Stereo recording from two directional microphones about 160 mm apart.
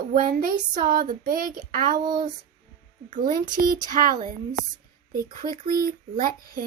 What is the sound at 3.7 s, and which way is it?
Speech, 60° right (ahead or behind).